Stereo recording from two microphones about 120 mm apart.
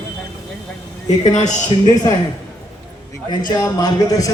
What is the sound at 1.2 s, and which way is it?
Speech, 70° left (ahead or behind).